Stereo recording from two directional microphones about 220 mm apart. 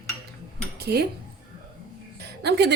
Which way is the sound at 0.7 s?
45° right (ahead or behind).